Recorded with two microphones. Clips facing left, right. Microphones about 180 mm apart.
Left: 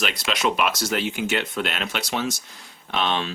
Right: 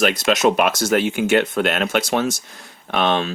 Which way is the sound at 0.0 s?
45° right (ahead or behind).